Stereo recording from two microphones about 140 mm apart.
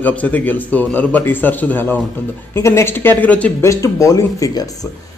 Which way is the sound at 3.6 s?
20° left (ahead or behind).